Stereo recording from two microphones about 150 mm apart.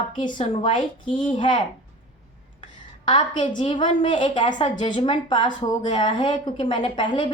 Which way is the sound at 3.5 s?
35° left (ahead or behind).